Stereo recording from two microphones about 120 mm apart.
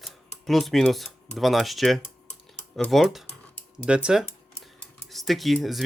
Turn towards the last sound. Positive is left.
turn(degrees=0)  # may be behind; listen again after turning